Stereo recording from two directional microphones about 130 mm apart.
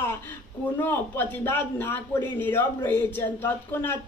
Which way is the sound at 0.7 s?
15° left (ahead or behind).